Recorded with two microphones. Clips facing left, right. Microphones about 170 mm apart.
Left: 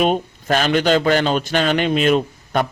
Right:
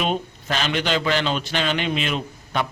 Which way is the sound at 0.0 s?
50° left (ahead or behind).